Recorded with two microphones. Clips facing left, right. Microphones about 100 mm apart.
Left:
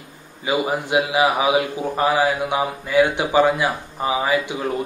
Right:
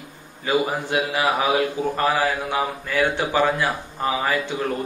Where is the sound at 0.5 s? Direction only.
15° left (ahead or behind).